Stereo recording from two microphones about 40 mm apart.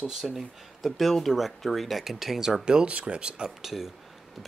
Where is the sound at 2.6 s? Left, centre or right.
Right.